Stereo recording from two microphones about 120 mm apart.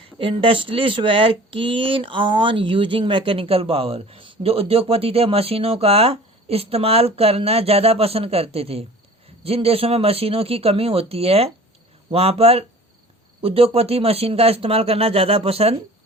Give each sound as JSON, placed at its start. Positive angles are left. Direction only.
{"t": 0.2, "sound": "speech", "side_deg": -45}